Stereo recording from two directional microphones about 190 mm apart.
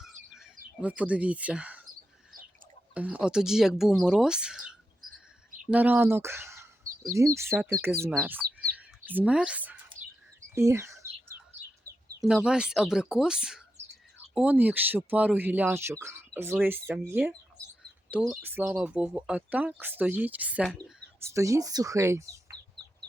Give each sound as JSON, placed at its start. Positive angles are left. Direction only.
{"t": 0.3, "sound": "speech", "side_deg": -5}
{"t": 2.9, "sound": "speech", "side_deg": -5}
{"t": 8.7, "sound": "chirp", "side_deg": -10}
{"t": 12.2, "sound": "speech", "side_deg": -5}
{"t": 20.7, "sound": "speech", "side_deg": 5}
{"t": 21.2, "sound": "speech", "side_deg": -15}